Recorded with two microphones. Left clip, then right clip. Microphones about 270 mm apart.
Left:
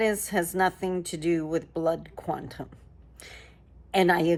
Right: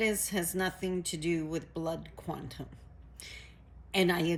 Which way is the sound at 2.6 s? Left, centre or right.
Left.